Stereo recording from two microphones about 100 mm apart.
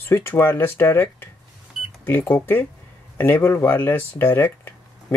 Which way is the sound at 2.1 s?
20° left (ahead or behind).